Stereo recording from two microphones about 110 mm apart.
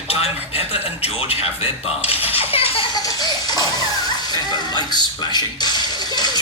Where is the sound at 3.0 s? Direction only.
40° left (ahead or behind).